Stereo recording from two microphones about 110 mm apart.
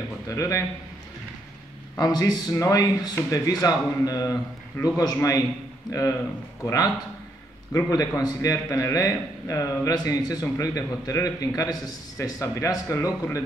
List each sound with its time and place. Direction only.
0.3 s a man's voice: 30° left (ahead or behind)
2.0 s a man's voice: 35° left (ahead or behind)